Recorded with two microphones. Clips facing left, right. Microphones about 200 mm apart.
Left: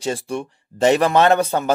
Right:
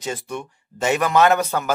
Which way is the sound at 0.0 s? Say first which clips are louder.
Left 4 dB; 30° left (ahead or behind).